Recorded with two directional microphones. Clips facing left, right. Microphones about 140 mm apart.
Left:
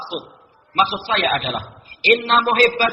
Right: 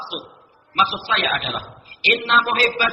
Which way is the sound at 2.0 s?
35° left (ahead or behind).